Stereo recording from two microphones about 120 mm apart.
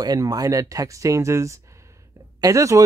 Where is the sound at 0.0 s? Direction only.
30° right (ahead or behind).